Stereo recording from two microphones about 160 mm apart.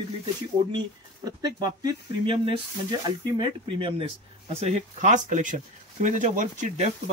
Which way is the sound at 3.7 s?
35° right (ahead or behind).